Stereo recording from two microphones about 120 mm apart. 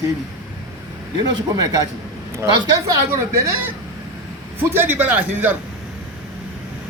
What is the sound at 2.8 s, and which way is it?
Speech, 20° right (ahead or behind).